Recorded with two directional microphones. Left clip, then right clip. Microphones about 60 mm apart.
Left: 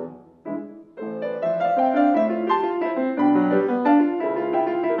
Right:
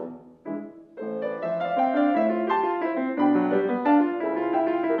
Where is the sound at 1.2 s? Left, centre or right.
Right.